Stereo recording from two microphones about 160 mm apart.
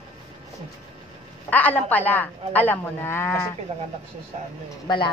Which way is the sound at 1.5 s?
10° left (ahead or behind).